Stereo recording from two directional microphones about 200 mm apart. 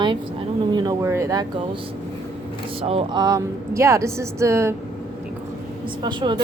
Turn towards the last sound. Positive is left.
turn(degrees=-25)  # may be behind; listen again after turning